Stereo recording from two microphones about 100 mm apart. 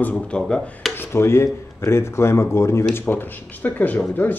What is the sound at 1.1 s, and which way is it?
Speech, 25° left (ahead or behind).